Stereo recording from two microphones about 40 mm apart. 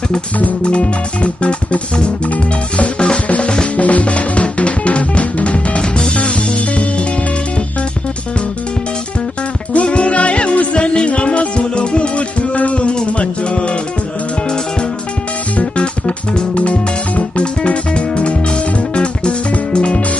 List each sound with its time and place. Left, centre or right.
0.7 s music: left
9.8 s music: left
15.5 s music: left